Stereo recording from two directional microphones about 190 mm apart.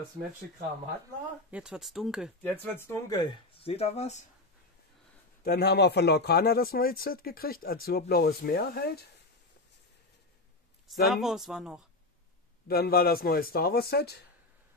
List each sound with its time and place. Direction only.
1.5 s speech: 5° right (ahead or behind)
2.4 s speech: 10° left (ahead or behind); by 4.2 s 35° left (ahead or behind)
5.4 s speech: 55° left (ahead or behind)
11.1 s speech: centre (ahead or behind)
12.6 s a man's voice: 55° left (ahead or behind)